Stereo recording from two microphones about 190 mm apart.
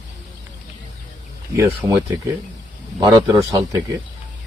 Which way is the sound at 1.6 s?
15° right (ahead or behind).